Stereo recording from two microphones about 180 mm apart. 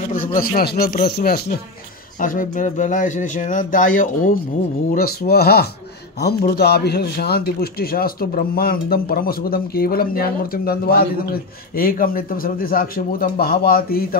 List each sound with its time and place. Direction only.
0.4 s a man's voice: 55° left (ahead or behind)
2.1 s speech: 50° left (ahead or behind)
4.9 s a man's voice: 60° left (ahead or behind)